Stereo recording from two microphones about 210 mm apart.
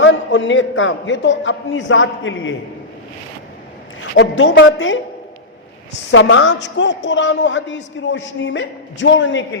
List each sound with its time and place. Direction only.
0.0 s a man's voice: 60° left (ahead or behind)
4.1 s a woman's voice: 60° left (ahead or behind)
6.1 s a man's voice: 60° left (ahead or behind)